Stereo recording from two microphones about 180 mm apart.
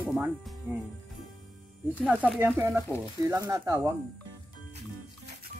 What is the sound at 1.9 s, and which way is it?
Speech, 10° right (ahead or behind).